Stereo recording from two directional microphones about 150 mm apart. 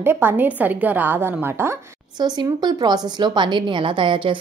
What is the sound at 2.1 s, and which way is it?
A woman's voice, 30° right (ahead or behind).